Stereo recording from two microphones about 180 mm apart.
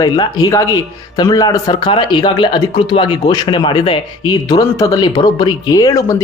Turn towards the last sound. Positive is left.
turn(degrees=20)  # may be behind; listen again after turning